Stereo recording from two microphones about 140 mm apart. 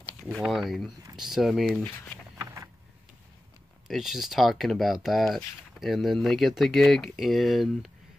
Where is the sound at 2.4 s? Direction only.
20° right (ahead or behind).